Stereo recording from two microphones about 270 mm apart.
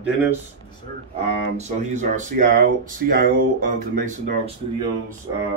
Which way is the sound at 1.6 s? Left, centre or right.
Right.